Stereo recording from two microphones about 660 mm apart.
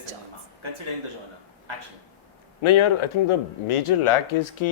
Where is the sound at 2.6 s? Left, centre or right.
Left.